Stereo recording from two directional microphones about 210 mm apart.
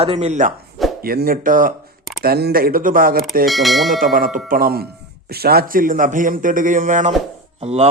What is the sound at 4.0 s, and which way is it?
A man's voice, 40° right (ahead or behind).